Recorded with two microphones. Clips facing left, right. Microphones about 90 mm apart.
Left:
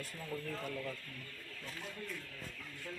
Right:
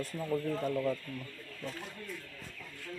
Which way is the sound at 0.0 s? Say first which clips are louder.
Right 9 dB; 30° right (ahead or behind).